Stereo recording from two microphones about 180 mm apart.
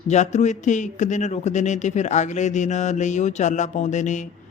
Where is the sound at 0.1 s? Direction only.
40° left (ahead or behind).